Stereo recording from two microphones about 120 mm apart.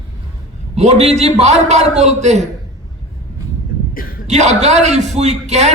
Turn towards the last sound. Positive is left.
turn(degrees=-70)  # may be behind; listen again after turning